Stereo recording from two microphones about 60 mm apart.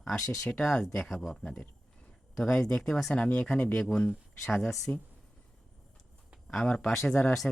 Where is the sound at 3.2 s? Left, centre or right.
Left.